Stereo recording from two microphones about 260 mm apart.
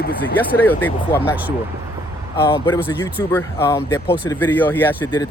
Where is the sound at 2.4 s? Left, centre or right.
Centre.